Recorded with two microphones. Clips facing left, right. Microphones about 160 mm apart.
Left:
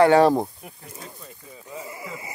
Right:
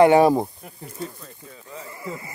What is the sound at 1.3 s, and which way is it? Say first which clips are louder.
Sheep: left 1 dB; 15° left (ahead or behind).